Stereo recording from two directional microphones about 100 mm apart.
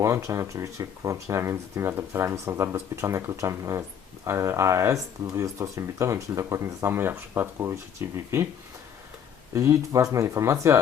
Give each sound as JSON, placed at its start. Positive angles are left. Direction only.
{"t": 0.0, "sound": "speech", "side_deg": -30}
{"t": 9.6, "sound": "speech", "side_deg": -35}